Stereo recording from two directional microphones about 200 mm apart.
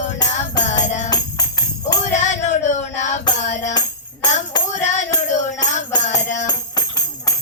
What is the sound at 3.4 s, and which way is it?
Music, 35° left (ahead or behind).